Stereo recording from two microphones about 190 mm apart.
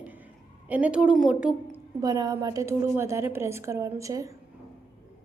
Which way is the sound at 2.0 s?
20° right (ahead or behind).